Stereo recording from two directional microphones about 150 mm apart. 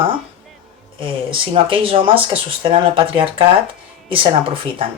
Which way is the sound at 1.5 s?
40° right (ahead or behind).